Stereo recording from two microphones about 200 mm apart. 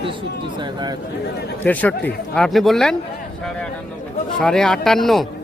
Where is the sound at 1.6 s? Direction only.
5° left (ahead or behind).